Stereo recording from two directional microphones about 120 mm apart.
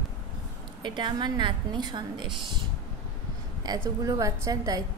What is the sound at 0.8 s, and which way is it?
A woman's voice, 40° right (ahead or behind).